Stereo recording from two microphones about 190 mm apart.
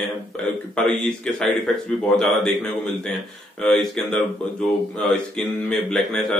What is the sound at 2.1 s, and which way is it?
Speech, 5° left (ahead or behind).